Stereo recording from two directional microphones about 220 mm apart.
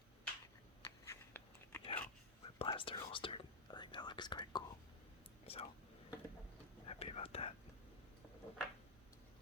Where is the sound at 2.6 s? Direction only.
25° left (ahead or behind).